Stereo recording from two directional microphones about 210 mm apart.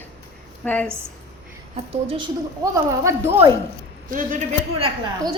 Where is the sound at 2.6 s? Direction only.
15° right (ahead or behind).